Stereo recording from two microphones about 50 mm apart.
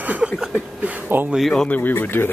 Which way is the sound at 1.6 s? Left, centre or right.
Left.